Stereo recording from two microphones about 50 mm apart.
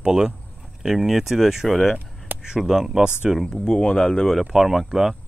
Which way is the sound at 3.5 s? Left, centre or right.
Centre.